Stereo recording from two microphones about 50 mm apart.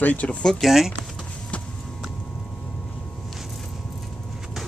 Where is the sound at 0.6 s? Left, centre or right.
Centre.